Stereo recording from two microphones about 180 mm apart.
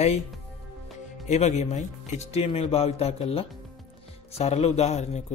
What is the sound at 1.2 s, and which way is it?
Speech, 35° left (ahead or behind).